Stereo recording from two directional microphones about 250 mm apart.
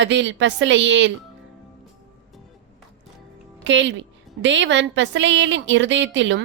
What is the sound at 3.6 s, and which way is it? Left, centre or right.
A woman's voice, right.